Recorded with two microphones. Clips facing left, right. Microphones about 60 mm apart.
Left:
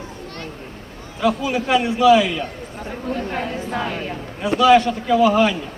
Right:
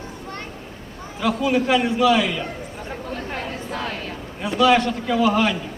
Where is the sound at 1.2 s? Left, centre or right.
Centre.